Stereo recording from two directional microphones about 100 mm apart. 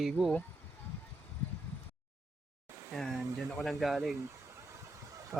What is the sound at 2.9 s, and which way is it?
Speech, centre (ahead or behind).